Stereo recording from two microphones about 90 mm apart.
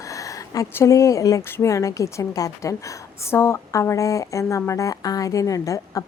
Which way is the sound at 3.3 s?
30° left (ahead or behind).